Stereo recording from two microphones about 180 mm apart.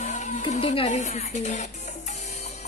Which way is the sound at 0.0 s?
40° left (ahead or behind).